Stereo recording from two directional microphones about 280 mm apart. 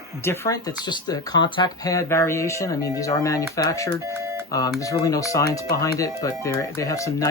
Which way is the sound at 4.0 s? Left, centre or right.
Centre.